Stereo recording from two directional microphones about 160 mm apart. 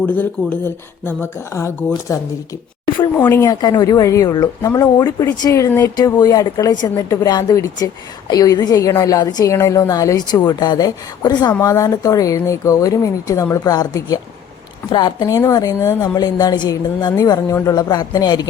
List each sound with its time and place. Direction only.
0.0 s speech: 10° left (ahead or behind)
3.2 s a woman's voice: 15° left (ahead or behind)